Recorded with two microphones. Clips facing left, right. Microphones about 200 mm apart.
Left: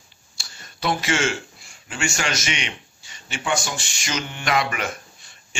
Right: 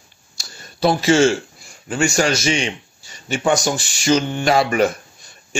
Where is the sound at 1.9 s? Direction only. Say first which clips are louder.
Right 9 dB; 40° right (ahead or behind).